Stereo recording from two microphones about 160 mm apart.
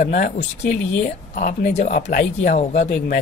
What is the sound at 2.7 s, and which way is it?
Speech, 90° left.